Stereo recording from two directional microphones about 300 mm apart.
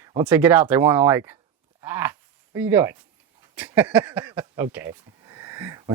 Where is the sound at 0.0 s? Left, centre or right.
Centre.